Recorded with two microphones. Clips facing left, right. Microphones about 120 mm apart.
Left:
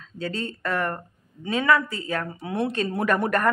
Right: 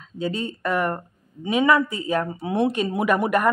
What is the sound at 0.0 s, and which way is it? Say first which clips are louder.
Speech: right 3 dB; 15° right (ahead or behind).